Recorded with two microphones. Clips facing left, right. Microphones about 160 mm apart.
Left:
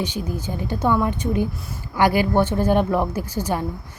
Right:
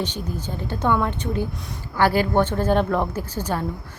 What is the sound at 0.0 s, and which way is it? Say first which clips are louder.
A woman's voice: left 2 dB; 10° left (ahead or behind).